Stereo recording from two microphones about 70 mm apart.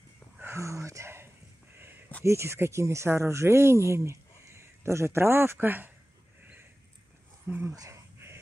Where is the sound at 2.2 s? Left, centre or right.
Right.